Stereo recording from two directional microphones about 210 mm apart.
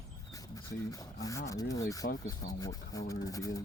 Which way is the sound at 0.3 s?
15° left (ahead or behind).